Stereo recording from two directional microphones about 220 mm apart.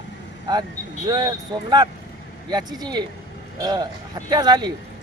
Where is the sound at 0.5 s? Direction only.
20° right (ahead or behind).